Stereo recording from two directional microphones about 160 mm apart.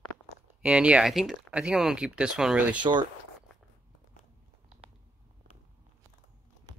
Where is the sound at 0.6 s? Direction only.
5° right (ahead or behind).